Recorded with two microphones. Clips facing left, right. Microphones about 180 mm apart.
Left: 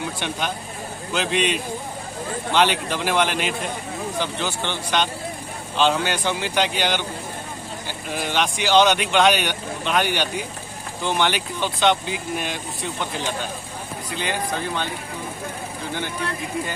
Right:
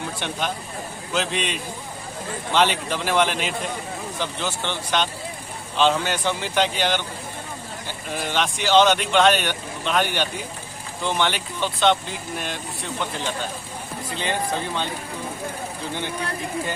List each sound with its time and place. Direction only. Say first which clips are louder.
1.1 s speech: left 3 dB; centre (ahead or behind)
8.3 s speech: even; 5° left (ahead or behind)